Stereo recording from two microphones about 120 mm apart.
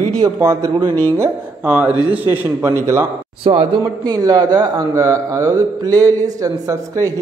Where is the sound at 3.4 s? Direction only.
50° right (ahead or behind).